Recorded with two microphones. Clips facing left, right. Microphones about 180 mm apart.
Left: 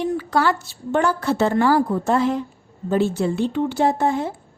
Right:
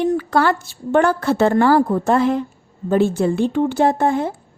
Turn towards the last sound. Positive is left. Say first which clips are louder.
# right 3 dB
turn(degrees=-55)  # may be behind; listen again after turning